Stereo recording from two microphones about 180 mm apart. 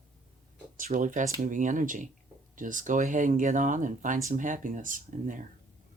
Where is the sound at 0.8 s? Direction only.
45° right (ahead or behind).